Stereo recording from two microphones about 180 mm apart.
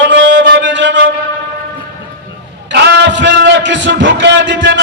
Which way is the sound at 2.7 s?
85° right.